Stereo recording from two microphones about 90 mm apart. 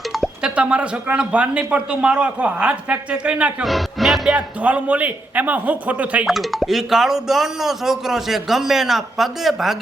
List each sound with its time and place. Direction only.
0.4 s speech: 15° right (ahead or behind)
3.6 s music: centre (ahead or behind)
4.4 s speech: 15° right (ahead or behind)
6.2 s speech: centre (ahead or behind)